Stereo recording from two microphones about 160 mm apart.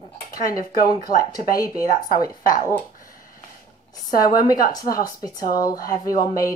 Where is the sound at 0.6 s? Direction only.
65° left (ahead or behind).